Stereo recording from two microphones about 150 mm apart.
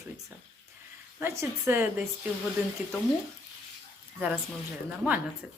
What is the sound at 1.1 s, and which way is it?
Speech, 15° right (ahead or behind).